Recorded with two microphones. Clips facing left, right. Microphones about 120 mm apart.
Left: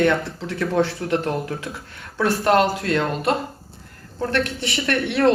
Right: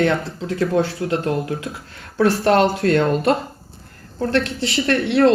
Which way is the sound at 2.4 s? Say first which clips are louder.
Right 1 dB; 30° right (ahead or behind).